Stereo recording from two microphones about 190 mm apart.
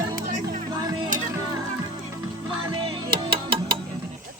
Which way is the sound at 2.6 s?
25° right (ahead or behind).